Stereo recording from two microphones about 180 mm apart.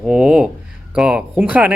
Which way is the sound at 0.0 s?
5° right (ahead or behind).